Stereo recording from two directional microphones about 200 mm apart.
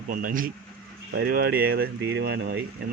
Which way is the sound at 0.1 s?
45° right (ahead or behind).